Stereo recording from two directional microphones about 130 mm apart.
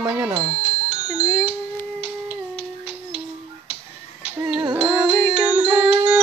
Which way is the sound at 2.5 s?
45° left (ahead or behind).